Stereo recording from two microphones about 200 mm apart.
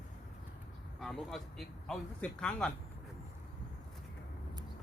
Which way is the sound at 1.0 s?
Centre (ahead or behind).